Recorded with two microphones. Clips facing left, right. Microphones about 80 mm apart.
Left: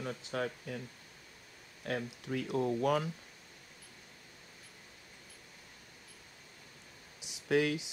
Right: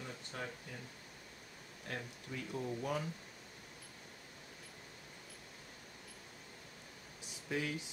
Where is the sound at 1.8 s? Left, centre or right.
Left.